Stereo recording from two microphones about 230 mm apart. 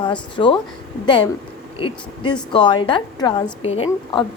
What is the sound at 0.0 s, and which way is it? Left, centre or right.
Speech, left.